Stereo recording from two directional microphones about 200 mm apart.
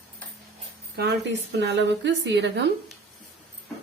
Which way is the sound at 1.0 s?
60° right (ahead or behind).